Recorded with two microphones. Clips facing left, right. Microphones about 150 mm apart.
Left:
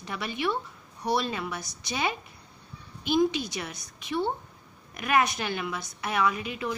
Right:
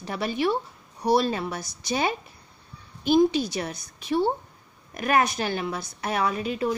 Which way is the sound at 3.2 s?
35° right (ahead or behind).